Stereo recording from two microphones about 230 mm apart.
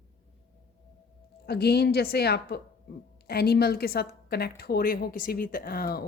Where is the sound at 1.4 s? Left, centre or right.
Left.